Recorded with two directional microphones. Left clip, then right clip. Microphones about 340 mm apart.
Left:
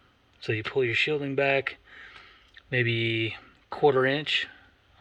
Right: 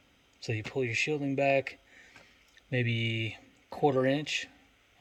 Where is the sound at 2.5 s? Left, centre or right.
Centre.